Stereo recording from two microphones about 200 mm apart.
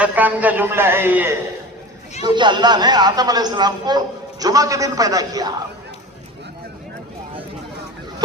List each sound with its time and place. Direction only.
0.0 s a man's voice: 10° right (ahead or behind)
2.2 s a man's voice: 25° right (ahead or behind)